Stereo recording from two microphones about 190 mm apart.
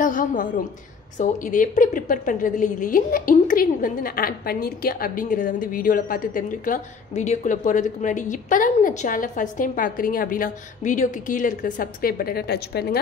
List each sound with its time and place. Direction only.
0.0 s a woman's voice: 45° left (ahead or behind)